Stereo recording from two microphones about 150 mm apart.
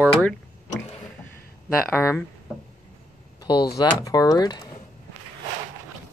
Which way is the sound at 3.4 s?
30° left (ahead or behind).